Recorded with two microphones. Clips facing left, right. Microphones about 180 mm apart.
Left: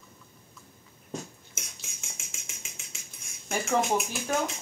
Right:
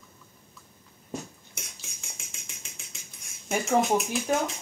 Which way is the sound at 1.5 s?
Centre (ahead or behind).